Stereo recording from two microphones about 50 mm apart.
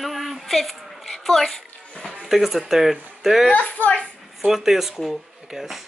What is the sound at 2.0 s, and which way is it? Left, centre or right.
Speech, centre.